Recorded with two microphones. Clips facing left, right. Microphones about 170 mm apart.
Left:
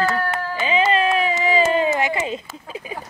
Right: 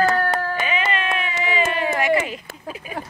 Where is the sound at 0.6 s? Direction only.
30° left (ahead or behind).